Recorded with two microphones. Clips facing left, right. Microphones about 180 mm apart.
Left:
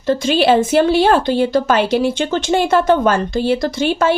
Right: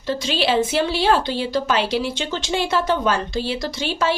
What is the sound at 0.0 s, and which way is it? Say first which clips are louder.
Speech: left 8 dB; 50° left (ahead or behind).